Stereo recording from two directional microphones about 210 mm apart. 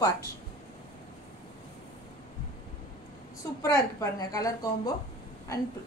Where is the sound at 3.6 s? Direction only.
15° left (ahead or behind).